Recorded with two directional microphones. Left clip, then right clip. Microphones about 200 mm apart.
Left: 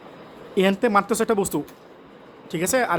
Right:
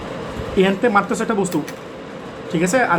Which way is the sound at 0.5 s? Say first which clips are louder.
Right 3 dB; 55° left (ahead or behind).